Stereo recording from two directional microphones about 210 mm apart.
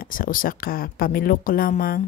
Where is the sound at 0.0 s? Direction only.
40° left (ahead or behind).